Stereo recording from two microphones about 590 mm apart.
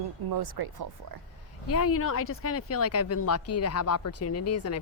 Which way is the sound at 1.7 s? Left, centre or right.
Left.